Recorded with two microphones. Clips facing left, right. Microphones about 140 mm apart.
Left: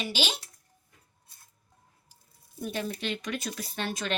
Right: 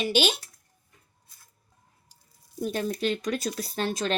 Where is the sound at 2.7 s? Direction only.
40° right (ahead or behind).